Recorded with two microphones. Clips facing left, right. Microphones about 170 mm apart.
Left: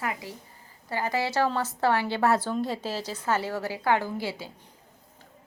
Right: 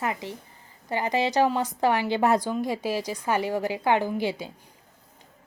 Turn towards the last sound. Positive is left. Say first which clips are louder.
# right 5 dB
turn(degrees=-20)  # may be behind; listen again after turning